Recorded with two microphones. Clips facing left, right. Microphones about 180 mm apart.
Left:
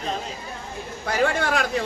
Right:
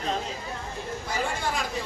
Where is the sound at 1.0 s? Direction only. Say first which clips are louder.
Left 8 dB; 70° left (ahead or behind).